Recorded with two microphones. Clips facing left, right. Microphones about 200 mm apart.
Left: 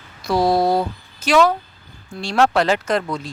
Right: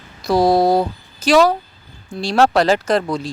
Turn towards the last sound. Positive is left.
turn(degrees=-35)  # may be behind; listen again after turning